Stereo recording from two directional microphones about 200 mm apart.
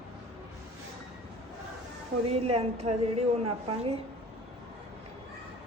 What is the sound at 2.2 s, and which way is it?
A woman's voice, 30° right (ahead or behind).